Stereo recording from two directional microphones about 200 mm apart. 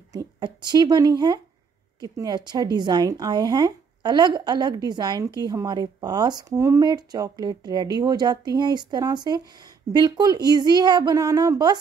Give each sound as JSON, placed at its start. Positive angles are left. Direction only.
{"t": 0.1, "sound": "speech", "side_deg": -20}